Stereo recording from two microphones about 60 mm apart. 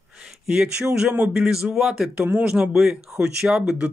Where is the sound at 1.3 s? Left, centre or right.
Centre.